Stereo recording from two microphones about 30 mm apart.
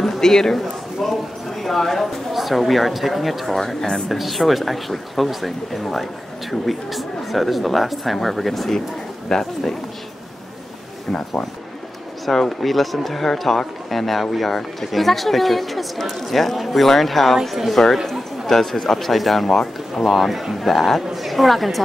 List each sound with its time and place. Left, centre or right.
0.2 s speech: centre
0.6 s a sound: centre
2.3 s speech: centre
9.3 s speech: centre
12.3 s a woman's voice: centre